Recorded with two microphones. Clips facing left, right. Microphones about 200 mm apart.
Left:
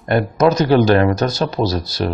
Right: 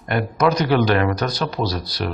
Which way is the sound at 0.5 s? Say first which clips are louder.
Left 5 dB; 35° left (ahead or behind).